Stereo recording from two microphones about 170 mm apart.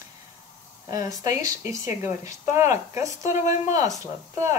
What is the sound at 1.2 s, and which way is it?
Speech, 20° right (ahead or behind).